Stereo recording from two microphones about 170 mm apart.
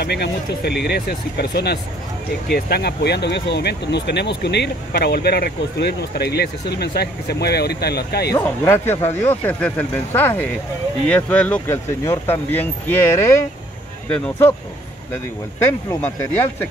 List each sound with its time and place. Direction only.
0.0 s speech: 75° left (ahead or behind)
8.3 s speech: 20° left (ahead or behind)
15.6 s speech: 15° left (ahead or behind)